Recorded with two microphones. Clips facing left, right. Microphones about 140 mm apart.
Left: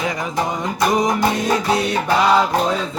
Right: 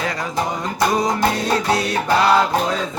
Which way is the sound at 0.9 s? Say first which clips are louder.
Left 2 dB; 20° left (ahead or behind).